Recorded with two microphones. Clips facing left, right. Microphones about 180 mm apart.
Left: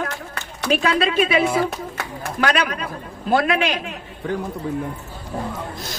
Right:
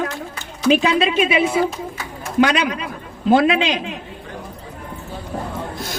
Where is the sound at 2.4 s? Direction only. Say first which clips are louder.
Right 4 dB; 20° right (ahead or behind).